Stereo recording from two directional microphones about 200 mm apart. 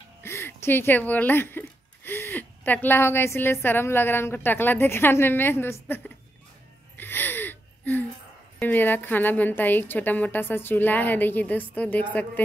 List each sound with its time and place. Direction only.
0.2 s speech: 10° left (ahead or behind)
7.0 s gasp: 10° left (ahead or behind)
8.5 s a woman's voice: 10° left (ahead or behind)